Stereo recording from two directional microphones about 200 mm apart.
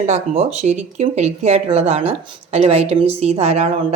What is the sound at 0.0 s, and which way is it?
Speech, 35° right (ahead or behind).